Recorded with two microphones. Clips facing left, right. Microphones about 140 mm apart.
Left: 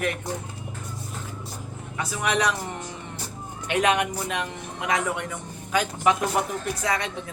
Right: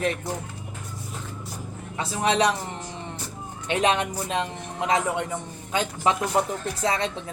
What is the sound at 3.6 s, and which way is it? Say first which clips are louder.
Speech: even; 25° right (ahead or behind).